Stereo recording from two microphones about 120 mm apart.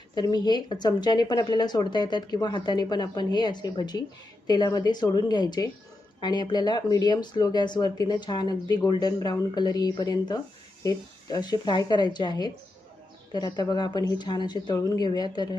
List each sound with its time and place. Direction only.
0.1 s speech: 35° left (ahead or behind)